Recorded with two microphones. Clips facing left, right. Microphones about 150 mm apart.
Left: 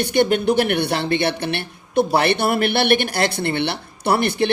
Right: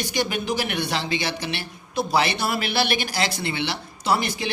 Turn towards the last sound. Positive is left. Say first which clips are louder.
# left 5 dB
turn(degrees=60)  # may be behind; listen again after turning